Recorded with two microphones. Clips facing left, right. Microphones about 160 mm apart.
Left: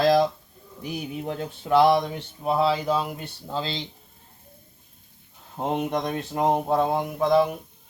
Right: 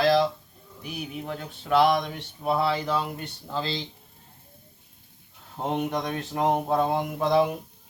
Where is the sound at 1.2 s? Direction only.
20° left (ahead or behind).